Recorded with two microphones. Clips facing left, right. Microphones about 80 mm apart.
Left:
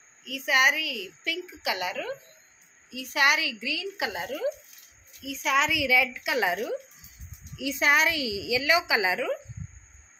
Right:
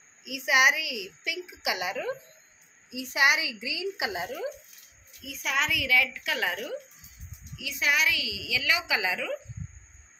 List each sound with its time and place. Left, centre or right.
0.2 s a woman's voice: centre
7.5 s a woman's voice: left